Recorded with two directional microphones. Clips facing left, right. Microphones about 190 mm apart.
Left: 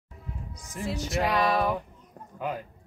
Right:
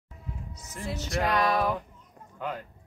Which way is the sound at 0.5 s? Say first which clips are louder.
Even; 10° left (ahead or behind).